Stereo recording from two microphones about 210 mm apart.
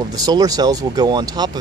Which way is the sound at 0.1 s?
20° right (ahead or behind).